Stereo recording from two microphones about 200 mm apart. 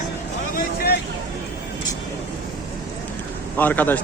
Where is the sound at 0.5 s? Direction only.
50° left (ahead or behind).